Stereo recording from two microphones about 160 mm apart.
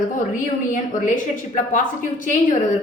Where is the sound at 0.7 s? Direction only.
55° left (ahead or behind).